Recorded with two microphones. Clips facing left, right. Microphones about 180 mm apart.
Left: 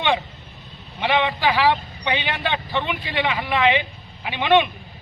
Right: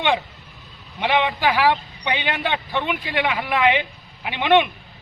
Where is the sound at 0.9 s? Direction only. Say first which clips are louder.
Even; 15° right (ahead or behind).